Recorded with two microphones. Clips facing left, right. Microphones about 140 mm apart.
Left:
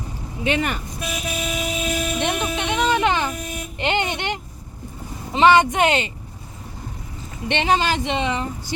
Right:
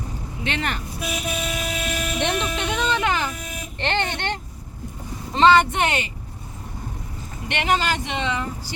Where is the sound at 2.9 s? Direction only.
20° left (ahead or behind).